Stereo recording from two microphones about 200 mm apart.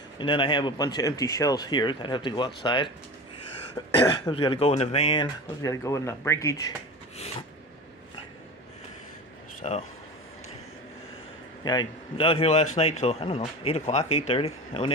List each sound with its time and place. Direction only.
0.2 s speech: 25° left (ahead or behind)
3.9 s speech: 25° left (ahead or behind)
9.6 s speech: 35° left (ahead or behind)
11.6 s speech: 20° left (ahead or behind)